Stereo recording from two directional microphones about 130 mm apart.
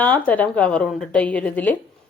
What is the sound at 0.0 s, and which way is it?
Speech, 10° left (ahead or behind).